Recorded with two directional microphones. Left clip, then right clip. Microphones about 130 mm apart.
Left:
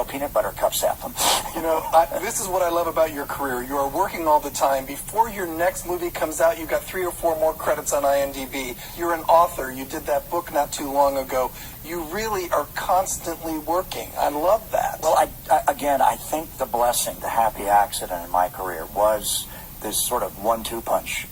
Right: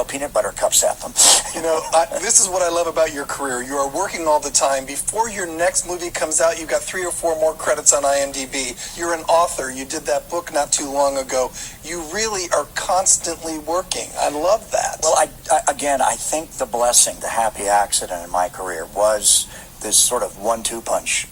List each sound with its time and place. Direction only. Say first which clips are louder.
0.0 s speech: right 3 dB; 30° right (ahead or behind)